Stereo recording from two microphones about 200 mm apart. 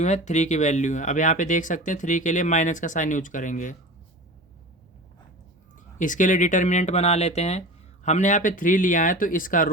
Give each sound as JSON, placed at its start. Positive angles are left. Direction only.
{"t": 0.0, "sound": "speech", "side_deg": 35}
{"t": 6.0, "sound": "speech", "side_deg": 40}